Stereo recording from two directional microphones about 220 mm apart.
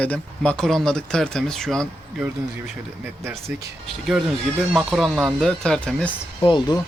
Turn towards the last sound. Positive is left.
turn(degrees=20)  # may be behind; listen again after turning